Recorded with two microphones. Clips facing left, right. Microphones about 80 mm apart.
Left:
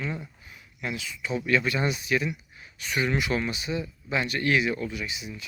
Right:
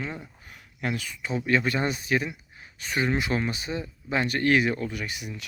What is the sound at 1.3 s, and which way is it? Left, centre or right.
Speech, right.